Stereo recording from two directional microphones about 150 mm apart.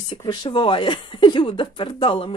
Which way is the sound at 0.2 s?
30° left (ahead or behind).